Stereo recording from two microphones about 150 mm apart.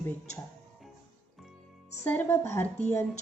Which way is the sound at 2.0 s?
15° left (ahead or behind).